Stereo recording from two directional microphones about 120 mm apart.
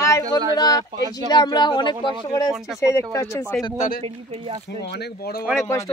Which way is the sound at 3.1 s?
25° left (ahead or behind).